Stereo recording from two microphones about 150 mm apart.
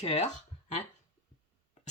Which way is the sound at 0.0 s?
45° left (ahead or behind).